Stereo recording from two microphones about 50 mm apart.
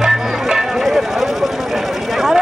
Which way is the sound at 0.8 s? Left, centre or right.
Centre.